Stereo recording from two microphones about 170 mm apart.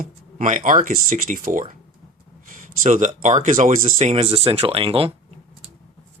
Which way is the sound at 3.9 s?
35° right (ahead or behind).